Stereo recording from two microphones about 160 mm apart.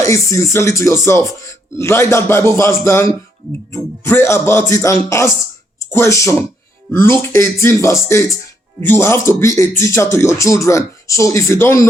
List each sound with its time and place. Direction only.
0.0 s speech: 20° left (ahead or behind)